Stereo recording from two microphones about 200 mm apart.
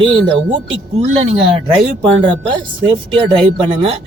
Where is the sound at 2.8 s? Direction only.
25° right (ahead or behind).